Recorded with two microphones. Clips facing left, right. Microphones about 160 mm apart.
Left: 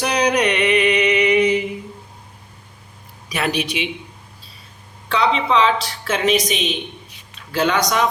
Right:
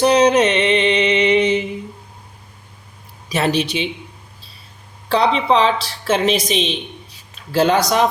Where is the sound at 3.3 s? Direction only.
30° right (ahead or behind).